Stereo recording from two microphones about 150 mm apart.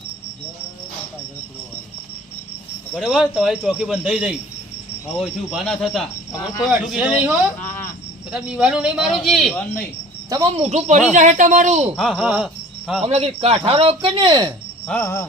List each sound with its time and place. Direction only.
2.9 s a man's voice: centre (ahead or behind)
7.6 s a sound: 10° left (ahead or behind)
8.3 s speech: 5° right (ahead or behind)
10.6 s a man's voice: 50° right (ahead or behind)
11.9 s speech: centre (ahead or behind)
13.1 s a man's voice: 45° right (ahead or behind); by 14.5 s 30° right (ahead or behind)
14.8 s cricket: 10° left (ahead or behind)